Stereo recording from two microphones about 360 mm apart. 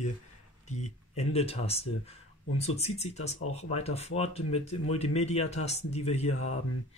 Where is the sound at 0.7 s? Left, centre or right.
Centre.